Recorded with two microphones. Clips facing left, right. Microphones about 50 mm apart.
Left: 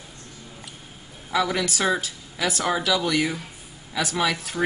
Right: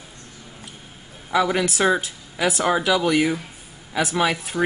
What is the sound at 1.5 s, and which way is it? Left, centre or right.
Speech, right.